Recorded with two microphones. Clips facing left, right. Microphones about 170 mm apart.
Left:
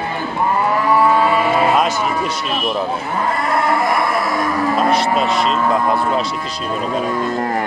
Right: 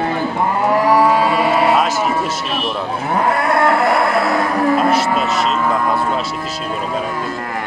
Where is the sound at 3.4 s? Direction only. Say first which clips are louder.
Right 1 dB; 65° right (ahead or behind).